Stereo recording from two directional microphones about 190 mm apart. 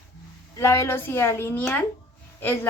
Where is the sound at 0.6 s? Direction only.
15° left (ahead or behind).